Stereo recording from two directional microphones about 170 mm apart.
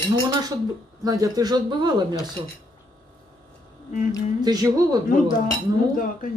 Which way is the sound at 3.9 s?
50° left (ahead or behind).